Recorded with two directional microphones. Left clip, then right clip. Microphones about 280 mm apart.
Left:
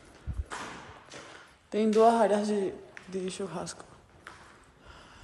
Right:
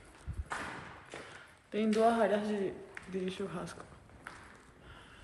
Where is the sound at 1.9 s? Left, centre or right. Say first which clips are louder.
Left 6 dB; centre.